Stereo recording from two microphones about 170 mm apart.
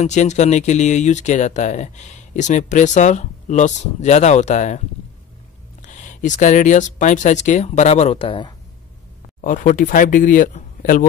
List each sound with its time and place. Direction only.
0.0 s speech: 45° left (ahead or behind)
9.4 s speech: 50° left (ahead or behind)